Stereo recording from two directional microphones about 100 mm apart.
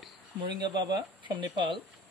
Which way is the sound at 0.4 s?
45° right (ahead or behind).